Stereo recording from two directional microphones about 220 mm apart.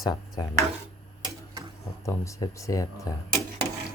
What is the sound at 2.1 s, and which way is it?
Speech, 15° left (ahead or behind).